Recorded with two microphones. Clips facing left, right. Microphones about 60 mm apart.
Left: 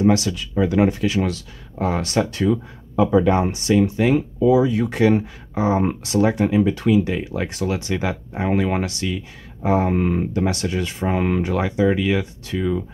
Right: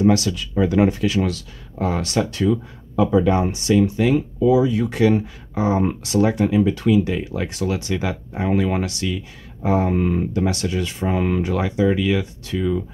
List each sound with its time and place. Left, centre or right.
0.0 s speech: left
0.6 s speech: centre
1.0 s speech: left